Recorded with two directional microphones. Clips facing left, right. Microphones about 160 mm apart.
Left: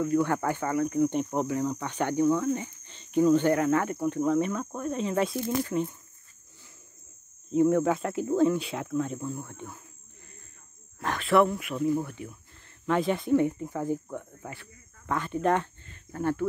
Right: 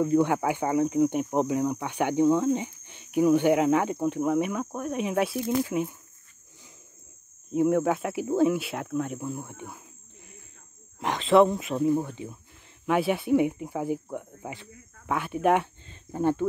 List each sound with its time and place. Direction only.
0.0 s speech: 20° right (ahead or behind)
7.5 s speech: 5° right (ahead or behind)
11.0 s speech: 20° right (ahead or behind)
12.8 s speech: 10° right (ahead or behind)